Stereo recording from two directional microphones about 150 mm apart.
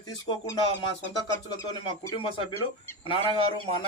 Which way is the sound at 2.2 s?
35° left (ahead or behind).